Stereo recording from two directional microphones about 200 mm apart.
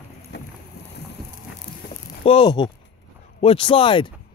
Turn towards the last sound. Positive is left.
turn(degrees=25)  # may be behind; listen again after turning